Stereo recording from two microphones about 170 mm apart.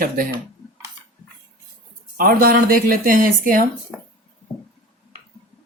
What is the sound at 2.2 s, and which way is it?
Speech, 55° right (ahead or behind).